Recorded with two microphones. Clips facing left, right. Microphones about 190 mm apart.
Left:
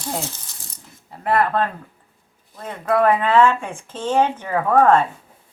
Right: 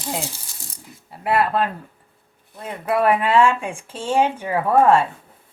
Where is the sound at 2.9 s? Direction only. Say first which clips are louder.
Left 1 dB; 10° right (ahead or behind).